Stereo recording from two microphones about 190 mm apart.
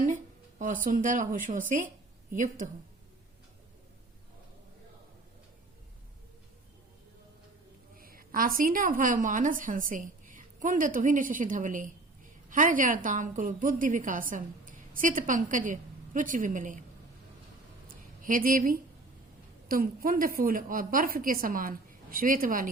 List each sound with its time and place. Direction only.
0.6 s a woman's voice: 45° right (ahead or behind)
7.9 s a woman's voice: 50° right (ahead or behind)
17.8 s a sound: 45° right (ahead or behind)
19.6 s a woman's voice: 50° right (ahead or behind)